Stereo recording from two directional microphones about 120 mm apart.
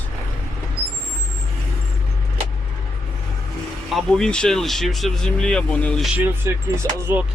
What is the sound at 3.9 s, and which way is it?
Speech, 5° left (ahead or behind).